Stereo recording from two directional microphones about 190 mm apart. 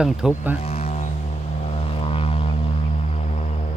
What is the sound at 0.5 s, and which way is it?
Vehicle, 35° left (ahead or behind).